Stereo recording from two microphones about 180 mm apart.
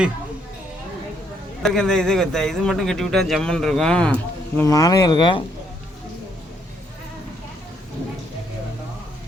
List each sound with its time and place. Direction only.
1.6 s speech: centre (ahead or behind)
4.6 s speech: 20° left (ahead or behind)